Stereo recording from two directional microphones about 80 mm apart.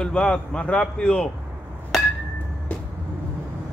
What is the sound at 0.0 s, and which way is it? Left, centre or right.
Speech, centre.